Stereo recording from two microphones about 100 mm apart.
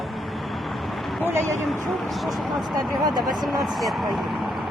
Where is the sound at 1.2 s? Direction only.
25° right (ahead or behind).